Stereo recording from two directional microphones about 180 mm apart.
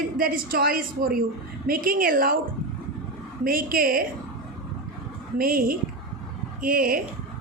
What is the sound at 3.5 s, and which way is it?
Speech, 55° right (ahead or behind).